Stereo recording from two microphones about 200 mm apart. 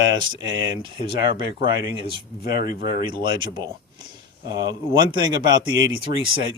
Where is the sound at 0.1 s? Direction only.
20° right (ahead or behind).